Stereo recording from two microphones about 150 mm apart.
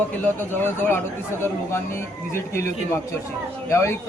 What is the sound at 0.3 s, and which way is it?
Speech, 10° left (ahead or behind).